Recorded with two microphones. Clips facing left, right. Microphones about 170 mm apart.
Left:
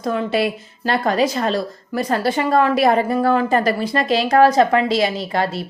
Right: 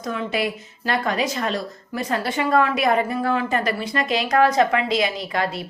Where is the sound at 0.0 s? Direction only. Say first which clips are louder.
Left 5 dB; 35° left (ahead or behind).